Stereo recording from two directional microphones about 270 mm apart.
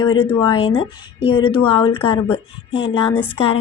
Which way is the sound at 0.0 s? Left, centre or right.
Centre.